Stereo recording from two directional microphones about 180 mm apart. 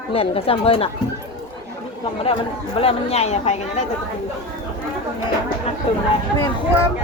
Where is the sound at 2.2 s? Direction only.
35° left (ahead or behind).